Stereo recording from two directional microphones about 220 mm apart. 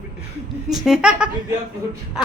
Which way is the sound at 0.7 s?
Centre (ahead or behind).